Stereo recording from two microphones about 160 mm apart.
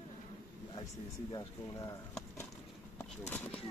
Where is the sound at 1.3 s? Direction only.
20° left (ahead or behind).